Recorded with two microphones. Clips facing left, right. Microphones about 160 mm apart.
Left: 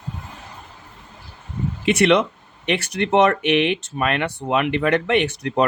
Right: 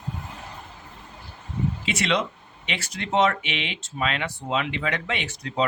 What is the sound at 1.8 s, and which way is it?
Speech, 60° left (ahead or behind).